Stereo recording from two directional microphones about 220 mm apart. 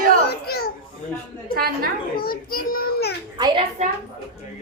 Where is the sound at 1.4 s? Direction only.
45° right (ahead or behind).